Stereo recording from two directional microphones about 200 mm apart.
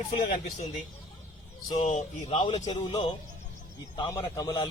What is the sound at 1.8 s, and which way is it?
Speech, 35° left (ahead or behind).